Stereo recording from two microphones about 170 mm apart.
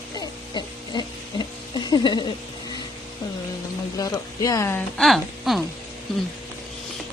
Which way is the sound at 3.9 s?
20° left (ahead or behind).